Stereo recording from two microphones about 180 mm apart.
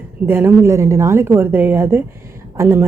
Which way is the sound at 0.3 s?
15° right (ahead or behind).